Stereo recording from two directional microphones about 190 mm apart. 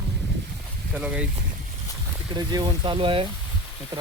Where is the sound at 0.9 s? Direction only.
5° right (ahead or behind).